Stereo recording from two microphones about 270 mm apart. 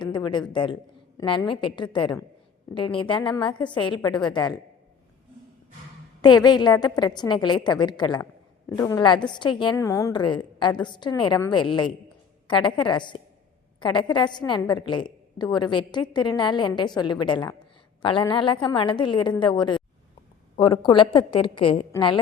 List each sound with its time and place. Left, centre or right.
0.0 s a woman's voice: centre
6.2 s a woman's voice: centre